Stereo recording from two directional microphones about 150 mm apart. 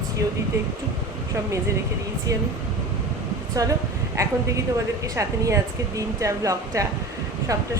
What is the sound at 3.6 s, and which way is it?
Speech, 20° right (ahead or behind).